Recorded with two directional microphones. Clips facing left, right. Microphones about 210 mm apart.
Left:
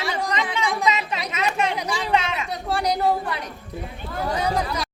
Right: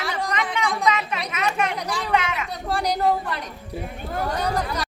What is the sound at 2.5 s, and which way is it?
A woman's voice, centre (ahead or behind).